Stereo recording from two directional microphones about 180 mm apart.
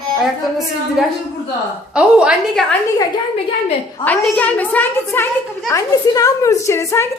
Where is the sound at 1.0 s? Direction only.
5° right (ahead or behind).